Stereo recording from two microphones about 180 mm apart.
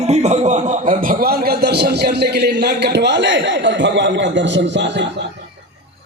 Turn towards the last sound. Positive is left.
turn(degrees=-80)